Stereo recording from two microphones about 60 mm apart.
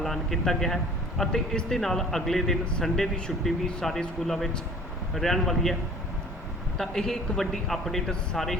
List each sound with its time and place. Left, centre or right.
0.0 s a man's voice: centre
6.7 s speech: centre